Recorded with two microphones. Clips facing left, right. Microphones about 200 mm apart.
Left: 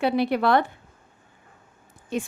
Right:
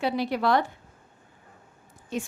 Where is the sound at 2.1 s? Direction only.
60° left (ahead or behind).